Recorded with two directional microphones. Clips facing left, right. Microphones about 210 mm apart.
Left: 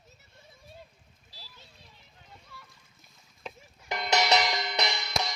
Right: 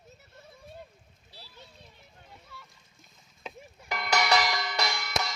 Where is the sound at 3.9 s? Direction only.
20° left (ahead or behind).